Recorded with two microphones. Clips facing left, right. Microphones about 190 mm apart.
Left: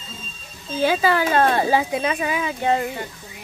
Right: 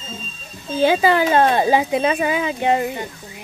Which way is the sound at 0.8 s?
25° right (ahead or behind).